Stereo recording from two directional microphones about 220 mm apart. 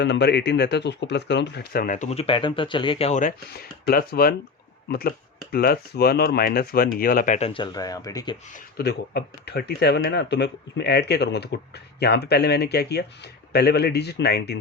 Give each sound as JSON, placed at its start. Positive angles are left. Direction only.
{"t": 0.0, "sound": "speech", "side_deg": 50}
{"t": 8.5, "sound": "speech", "side_deg": 50}